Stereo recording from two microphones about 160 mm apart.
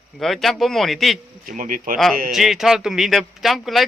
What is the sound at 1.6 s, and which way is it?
Speech, 60° right (ahead or behind).